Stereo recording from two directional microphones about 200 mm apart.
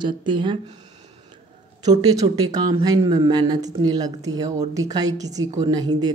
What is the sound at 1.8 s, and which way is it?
Speech, 20° right (ahead or behind).